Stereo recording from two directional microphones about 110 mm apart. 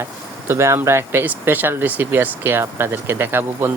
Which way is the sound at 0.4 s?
25° right (ahead or behind).